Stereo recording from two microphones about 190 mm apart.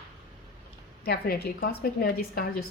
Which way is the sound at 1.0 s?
55° left (ahead or behind).